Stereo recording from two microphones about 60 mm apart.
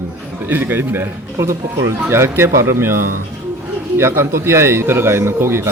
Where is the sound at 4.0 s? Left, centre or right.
Right.